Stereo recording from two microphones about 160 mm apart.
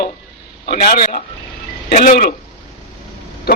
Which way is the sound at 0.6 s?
70° left (ahead or behind).